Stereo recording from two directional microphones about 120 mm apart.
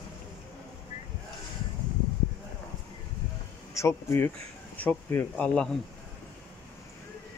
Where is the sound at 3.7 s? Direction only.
20° left (ahead or behind); by 5.7 s 5° left (ahead or behind).